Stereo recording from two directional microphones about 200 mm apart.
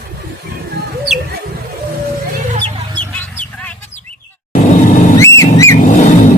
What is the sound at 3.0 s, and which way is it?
Chicken, 5° left (ahead or behind).